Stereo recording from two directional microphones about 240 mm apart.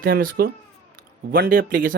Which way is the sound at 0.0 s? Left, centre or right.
Right.